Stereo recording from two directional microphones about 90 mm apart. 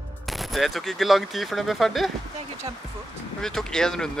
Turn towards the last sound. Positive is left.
turn(degrees=5)  # may be behind; listen again after turning